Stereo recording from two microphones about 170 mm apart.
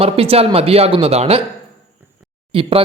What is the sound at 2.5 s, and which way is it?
Speech, 35° right (ahead or behind).